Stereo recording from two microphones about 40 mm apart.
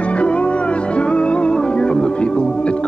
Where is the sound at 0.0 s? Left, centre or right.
Left.